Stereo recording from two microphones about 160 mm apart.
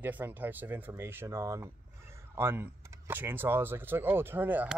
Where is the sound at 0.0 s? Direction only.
10° right (ahead or behind).